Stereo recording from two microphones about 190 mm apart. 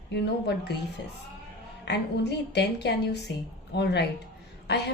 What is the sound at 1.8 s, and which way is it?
A woman's voice, 60° left (ahead or behind).